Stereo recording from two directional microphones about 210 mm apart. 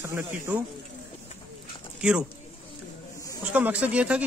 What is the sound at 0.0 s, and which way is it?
Speech, 10° right (ahead or behind).